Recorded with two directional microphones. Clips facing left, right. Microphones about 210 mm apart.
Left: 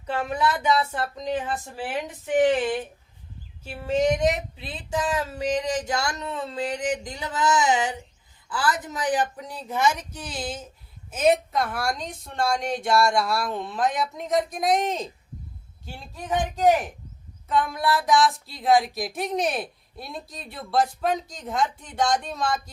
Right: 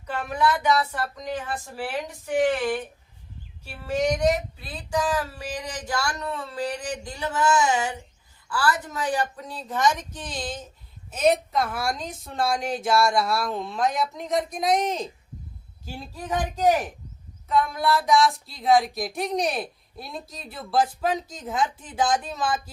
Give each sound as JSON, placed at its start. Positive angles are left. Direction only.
{"t": 0.7, "sound": "female singing", "side_deg": 25}
{"t": 3.8, "sound": "female singing", "side_deg": 25}
{"t": 8.4, "sound": "a woman's voice", "side_deg": 20}
{"t": 11.1, "sound": "child singing", "side_deg": 5}
{"t": 16.6, "sound": "child singing", "side_deg": 0}